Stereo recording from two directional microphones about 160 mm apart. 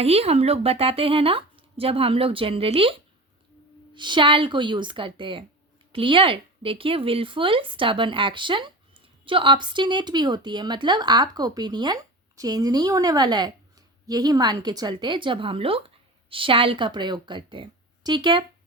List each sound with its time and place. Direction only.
0.0 s a woman's voice: 40° right (ahead or behind)
3.9 s a woman's voice: 30° right (ahead or behind)